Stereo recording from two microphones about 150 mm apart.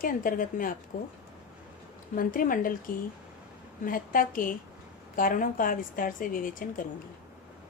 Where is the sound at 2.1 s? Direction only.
65° left (ahead or behind).